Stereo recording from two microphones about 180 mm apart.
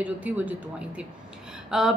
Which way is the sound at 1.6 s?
Centre (ahead or behind).